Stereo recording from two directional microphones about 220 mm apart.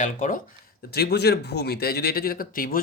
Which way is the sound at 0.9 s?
45° left (ahead or behind).